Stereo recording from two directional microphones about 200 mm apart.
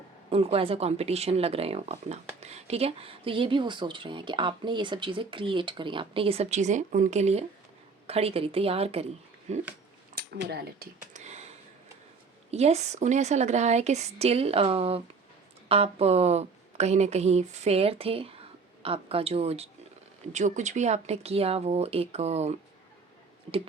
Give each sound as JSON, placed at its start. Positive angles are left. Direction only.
{"t": 0.3, "sound": "speech", "side_deg": -30}
{"t": 10.2, "sound": "speech", "side_deg": -50}
{"t": 11.2, "sound": "a sound", "side_deg": -35}
{"t": 12.5, "sound": "speech", "side_deg": -30}